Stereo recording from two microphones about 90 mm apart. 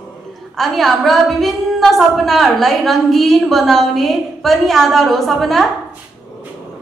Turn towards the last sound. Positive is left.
turn(degrees=0)  # may be behind; listen again after turning